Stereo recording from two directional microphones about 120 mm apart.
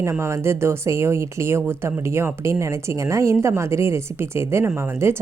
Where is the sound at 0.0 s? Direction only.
20° right (ahead or behind).